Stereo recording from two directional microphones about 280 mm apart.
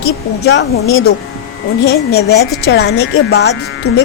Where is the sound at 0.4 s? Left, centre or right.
Left.